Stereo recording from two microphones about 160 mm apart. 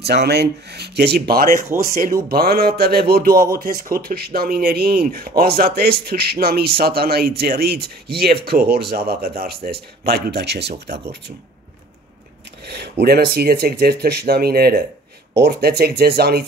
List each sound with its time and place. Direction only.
0.0 s speech: 90° right
12.6 s filing: 90° right
13.0 s speech: 75° right (ahead or behind)
15.3 s speech: 90° right